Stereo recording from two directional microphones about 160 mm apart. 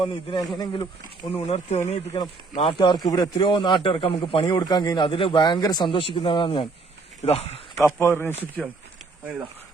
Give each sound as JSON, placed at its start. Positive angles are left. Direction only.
{"t": 0.0, "sound": "a man's voice", "side_deg": 30}
{"t": 1.3, "sound": "speech", "side_deg": 40}
{"t": 2.1, "sound": "a man's voice", "side_deg": 30}
{"t": 7.9, "sound": "speech", "side_deg": 15}